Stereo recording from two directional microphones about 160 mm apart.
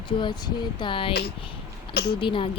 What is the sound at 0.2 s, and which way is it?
Speech, 30° left (ahead or behind).